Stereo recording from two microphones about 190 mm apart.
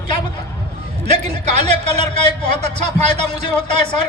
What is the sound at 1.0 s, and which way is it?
A man's voice, 35° right (ahead or behind).